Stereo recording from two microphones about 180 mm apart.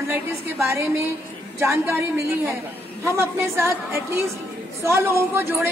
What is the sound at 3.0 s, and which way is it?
A woman's voice, 15° right (ahead or behind).